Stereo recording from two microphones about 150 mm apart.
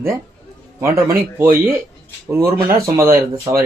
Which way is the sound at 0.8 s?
15° right (ahead or behind).